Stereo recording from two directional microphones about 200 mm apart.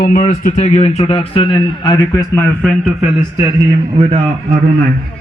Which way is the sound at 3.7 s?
25° right (ahead or behind).